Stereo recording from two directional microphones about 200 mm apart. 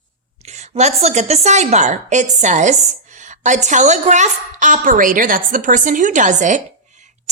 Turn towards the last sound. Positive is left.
turn(degrees=-35)  # may be behind; listen again after turning